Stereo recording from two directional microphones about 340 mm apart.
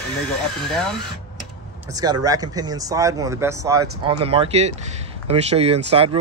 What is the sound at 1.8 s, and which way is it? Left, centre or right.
Speech, centre.